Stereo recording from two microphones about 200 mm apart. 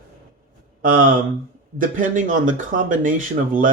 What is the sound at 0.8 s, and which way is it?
Speech, 45° right (ahead or behind).